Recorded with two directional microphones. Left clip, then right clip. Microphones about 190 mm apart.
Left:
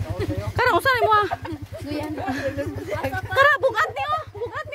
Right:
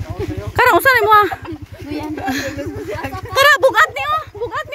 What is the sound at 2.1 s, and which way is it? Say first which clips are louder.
Speech: right 6 dB; 20° right (ahead or behind).